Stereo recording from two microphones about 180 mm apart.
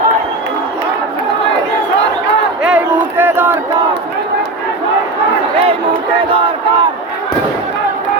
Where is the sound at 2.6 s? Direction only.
10° right (ahead or behind).